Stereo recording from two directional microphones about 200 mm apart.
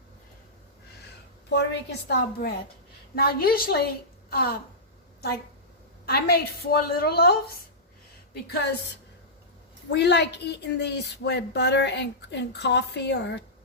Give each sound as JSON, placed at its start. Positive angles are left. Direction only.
{"t": 1.5, "sound": "a woman's voice", "side_deg": 55}
{"t": 6.1, "sound": "a woman's voice", "side_deg": 50}
{"t": 9.9, "sound": "a woman's voice", "side_deg": 60}